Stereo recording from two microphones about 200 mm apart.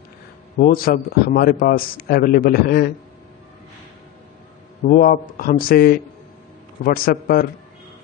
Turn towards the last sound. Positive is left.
turn(degrees=45)  # may be behind; listen again after turning